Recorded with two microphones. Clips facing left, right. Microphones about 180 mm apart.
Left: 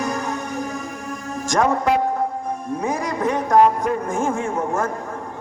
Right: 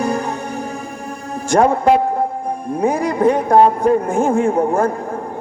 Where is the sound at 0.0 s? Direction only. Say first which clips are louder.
Right 4 dB; 30° right (ahead or behind).